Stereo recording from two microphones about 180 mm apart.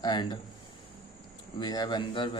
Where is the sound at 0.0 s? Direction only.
25° left (ahead or behind).